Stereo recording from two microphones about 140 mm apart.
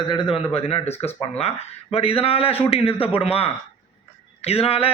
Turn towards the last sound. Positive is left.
turn(degrees=45)  # may be behind; listen again after turning